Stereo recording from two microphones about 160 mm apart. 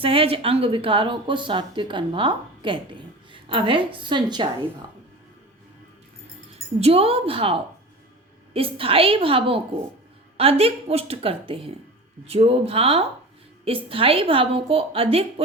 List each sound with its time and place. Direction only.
0.0 s a woman's voice: 35° right (ahead or behind)
6.7 s a woman's voice: 40° right (ahead or behind)